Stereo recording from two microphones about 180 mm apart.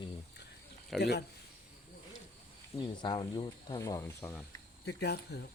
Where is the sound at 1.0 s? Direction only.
65° left (ahead or behind).